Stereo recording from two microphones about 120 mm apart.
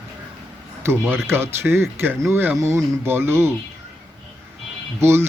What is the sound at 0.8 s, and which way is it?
A man's voice, 15° right (ahead or behind).